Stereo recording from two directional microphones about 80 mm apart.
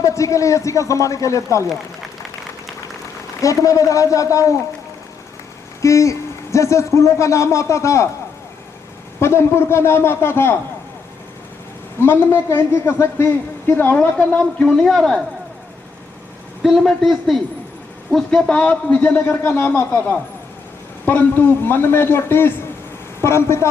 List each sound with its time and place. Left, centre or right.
0.0 s speech: left
3.4 s a man's voice: left
5.8 s speech: left
9.2 s speech: left
11.9 s a man's voice: left
14.2 s speech: centre
16.6 s a man's voice: centre; by 23.6 s left